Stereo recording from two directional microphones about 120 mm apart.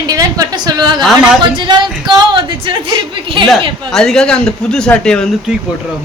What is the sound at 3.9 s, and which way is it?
Speech, 5° left (ahead or behind).